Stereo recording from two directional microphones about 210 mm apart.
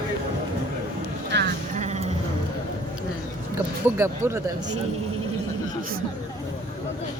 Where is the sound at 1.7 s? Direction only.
35° right (ahead or behind).